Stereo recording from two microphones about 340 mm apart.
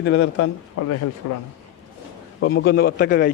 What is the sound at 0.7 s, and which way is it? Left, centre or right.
Speech, left.